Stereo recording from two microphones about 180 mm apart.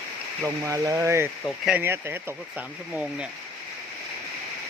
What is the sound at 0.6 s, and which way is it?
Speech, 15° right (ahead or behind).